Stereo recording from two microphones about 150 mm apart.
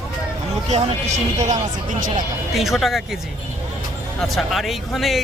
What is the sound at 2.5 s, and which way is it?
Speech, centre (ahead or behind).